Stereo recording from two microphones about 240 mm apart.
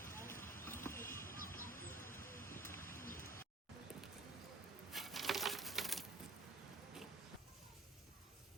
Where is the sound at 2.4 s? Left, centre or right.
Centre.